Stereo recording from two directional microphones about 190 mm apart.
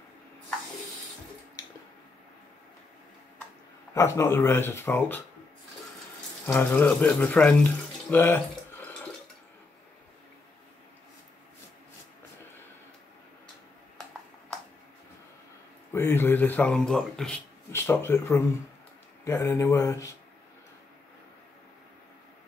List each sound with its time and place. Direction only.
3.9 s speech: 15° left (ahead or behind)
6.4 s speech: 10° left (ahead or behind)
15.9 s speech: 10° left (ahead or behind)